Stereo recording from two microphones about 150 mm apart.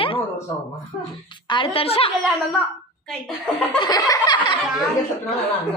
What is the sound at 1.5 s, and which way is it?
Speech, 35° left (ahead or behind).